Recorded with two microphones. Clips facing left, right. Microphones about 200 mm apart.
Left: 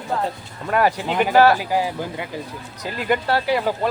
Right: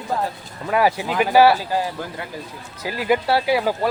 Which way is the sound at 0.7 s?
5° right (ahead or behind).